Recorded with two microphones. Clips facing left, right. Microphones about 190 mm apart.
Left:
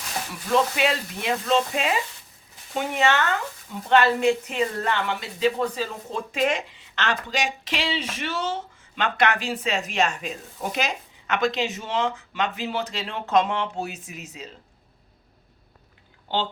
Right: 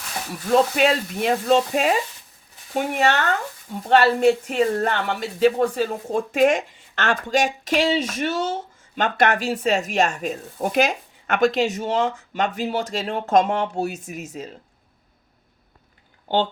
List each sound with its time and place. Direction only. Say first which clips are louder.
0.5 s speech: right 4 dB; 40° right (ahead or behind)